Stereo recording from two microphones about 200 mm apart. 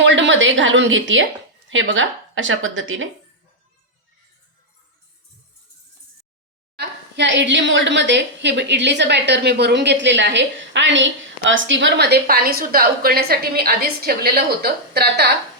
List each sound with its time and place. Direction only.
0.0 s a woman's voice: 65° right (ahead or behind)
6.7 s a woman's voice: 60° right (ahead or behind)